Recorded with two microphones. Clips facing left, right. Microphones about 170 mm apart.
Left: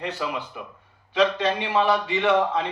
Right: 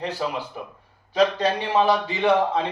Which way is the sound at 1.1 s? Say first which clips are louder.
Right 1 dB; 40° right (ahead or behind).